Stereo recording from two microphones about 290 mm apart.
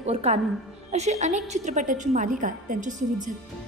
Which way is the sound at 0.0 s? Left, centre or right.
Right.